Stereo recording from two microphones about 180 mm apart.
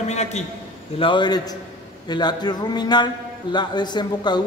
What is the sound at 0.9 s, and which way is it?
A man's voice, 25° left (ahead or behind).